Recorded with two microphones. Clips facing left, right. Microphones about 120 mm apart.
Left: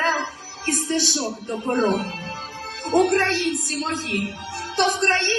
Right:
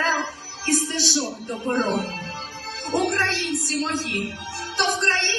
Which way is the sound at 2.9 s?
50° left (ahead or behind).